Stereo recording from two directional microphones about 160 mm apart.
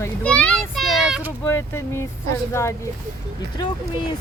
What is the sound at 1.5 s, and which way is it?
Speech, 15° left (ahead or behind).